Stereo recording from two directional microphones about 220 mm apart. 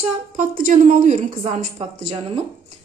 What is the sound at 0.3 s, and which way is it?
A woman's voice, 35° right (ahead or behind).